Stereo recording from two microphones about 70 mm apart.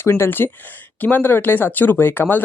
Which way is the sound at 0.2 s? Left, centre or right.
Left.